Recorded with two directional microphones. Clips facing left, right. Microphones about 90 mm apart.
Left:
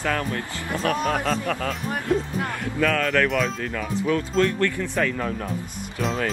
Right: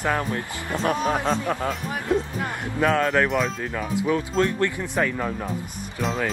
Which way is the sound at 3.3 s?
5° right (ahead or behind).